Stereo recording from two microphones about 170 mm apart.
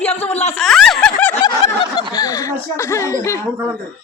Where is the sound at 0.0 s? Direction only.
35° left (ahead or behind).